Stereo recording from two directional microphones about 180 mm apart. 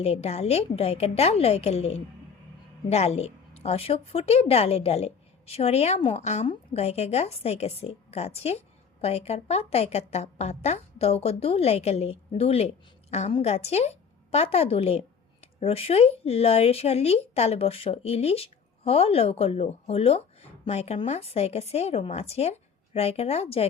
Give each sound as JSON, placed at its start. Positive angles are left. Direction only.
{"t": 0.0, "sound": "a woman's voice", "side_deg": 35}